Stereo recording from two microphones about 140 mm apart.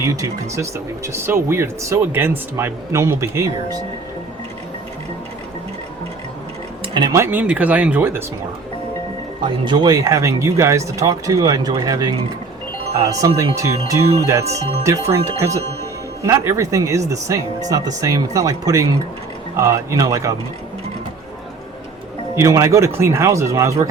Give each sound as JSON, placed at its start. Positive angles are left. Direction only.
{"t": 0.0, "sound": "speech", "side_deg": -20}
{"t": 6.9, "sound": "speech", "side_deg": -30}
{"t": 7.2, "sound": "speech", "side_deg": -15}
{"t": 9.4, "sound": "speech", "side_deg": -35}
{"t": 14.4, "sound": "speech", "side_deg": -50}
{"t": 15.1, "sound": "speech", "side_deg": -20}
{"t": 22.4, "sound": "speech", "side_deg": -20}